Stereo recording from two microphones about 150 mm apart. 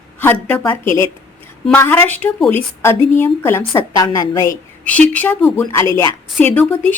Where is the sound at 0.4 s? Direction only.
15° left (ahead or behind).